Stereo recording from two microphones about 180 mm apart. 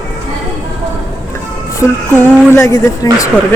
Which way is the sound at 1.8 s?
15° left (ahead or behind).